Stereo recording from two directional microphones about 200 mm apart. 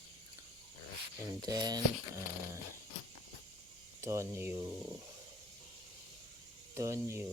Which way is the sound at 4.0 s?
15° right (ahead or behind).